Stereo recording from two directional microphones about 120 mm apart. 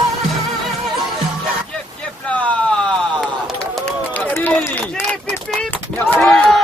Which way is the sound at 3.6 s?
10° left (ahead or behind).